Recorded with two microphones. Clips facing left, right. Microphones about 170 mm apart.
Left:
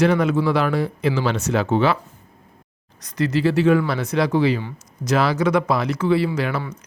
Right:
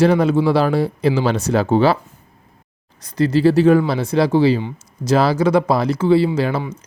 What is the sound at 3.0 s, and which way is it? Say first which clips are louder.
Speech: right 5 dB; 30° right (ahead or behind).